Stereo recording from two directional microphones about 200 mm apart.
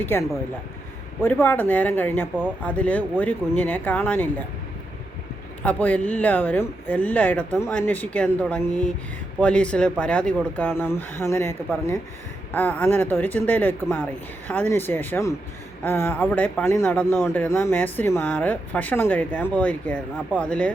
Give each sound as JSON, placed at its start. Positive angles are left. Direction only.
{"t": 0.0, "sound": "a man's voice", "side_deg": 10}
{"t": 5.6, "sound": "a man's voice", "side_deg": 10}